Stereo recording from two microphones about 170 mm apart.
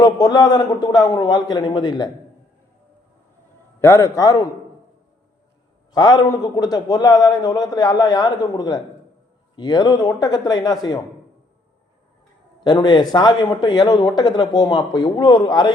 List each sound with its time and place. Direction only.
0.0 s speech: 25° left (ahead or behind)
3.8 s a man's voice: 15° left (ahead or behind)
5.9 s speech: 25° left (ahead or behind)
12.6 s speech: 25° left (ahead or behind)